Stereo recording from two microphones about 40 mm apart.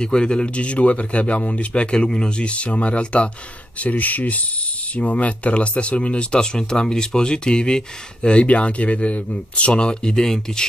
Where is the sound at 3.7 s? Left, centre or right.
Left.